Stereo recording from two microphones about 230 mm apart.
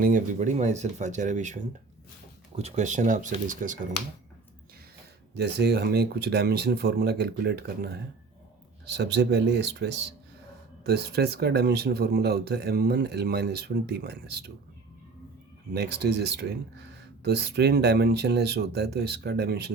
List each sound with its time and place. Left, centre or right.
0.0 s speech: right
2.6 s speech: right
5.4 s speech: right
15.7 s speech: right